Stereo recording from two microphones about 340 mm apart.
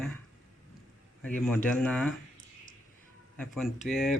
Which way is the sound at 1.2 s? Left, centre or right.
Centre.